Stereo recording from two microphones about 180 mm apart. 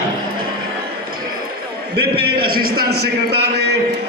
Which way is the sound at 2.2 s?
60° right (ahead or behind).